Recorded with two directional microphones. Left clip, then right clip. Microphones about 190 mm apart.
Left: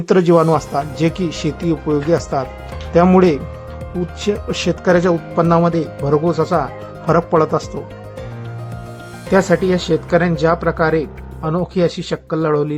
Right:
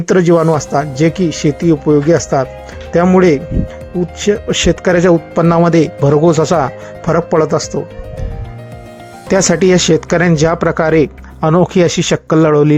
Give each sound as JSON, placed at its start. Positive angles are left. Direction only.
{"t": 0.0, "sound": "speech", "side_deg": -20}
{"t": 9.3, "sound": "speech", "side_deg": -35}